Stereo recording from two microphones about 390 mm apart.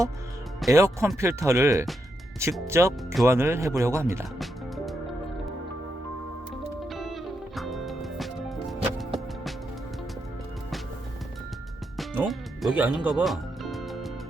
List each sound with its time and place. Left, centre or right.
0.6 s speech: centre
6.9 s music: centre
11.9 s music: centre